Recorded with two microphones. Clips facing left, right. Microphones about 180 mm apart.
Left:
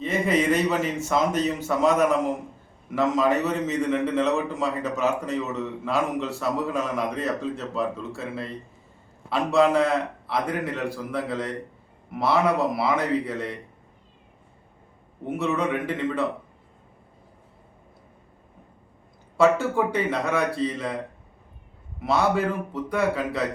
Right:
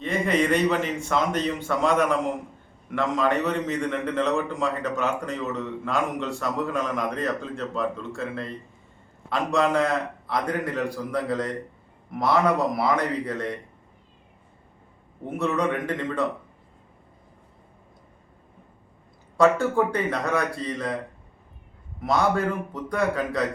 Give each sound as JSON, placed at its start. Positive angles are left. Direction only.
{"t": 0.0, "sound": "a man's voice", "side_deg": 5}
{"t": 15.4, "sound": "a man's voice", "side_deg": 5}
{"t": 19.4, "sound": "a man's voice", "side_deg": 5}
{"t": 22.0, "sound": "a man's voice", "side_deg": 5}